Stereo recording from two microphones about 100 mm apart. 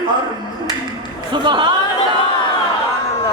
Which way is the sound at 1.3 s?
50° right (ahead or behind).